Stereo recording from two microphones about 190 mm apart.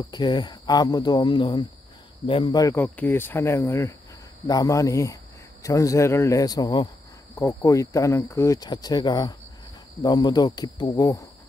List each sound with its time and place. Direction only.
0.1 s speech: 25° left (ahead or behind)